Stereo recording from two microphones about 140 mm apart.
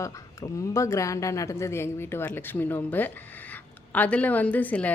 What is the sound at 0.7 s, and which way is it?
A woman's voice, 20° left (ahead or behind).